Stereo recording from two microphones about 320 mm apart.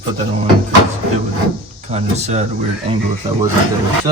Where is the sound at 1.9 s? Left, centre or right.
Right.